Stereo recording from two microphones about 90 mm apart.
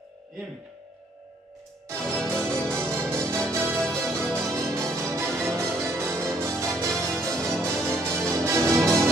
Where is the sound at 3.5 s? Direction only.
30° right (ahead or behind).